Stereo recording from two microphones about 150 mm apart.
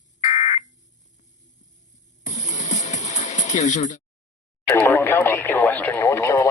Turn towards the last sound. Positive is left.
turn(degrees=15)  # may be behind; listen again after turning